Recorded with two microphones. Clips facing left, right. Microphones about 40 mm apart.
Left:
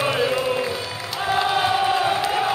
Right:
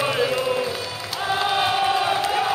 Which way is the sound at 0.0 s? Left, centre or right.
Centre.